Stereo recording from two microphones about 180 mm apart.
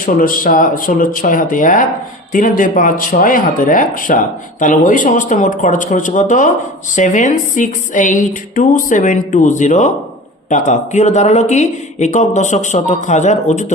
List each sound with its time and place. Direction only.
0.0 s a woman's voice: 50° left (ahead or behind)